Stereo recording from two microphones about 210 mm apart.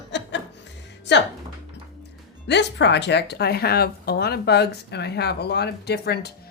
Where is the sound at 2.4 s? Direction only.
55° left (ahead or behind).